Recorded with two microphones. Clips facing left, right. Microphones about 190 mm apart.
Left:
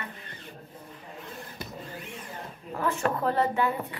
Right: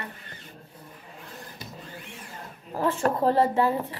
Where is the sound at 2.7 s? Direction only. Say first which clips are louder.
Right 3 dB; 30° right (ahead or behind).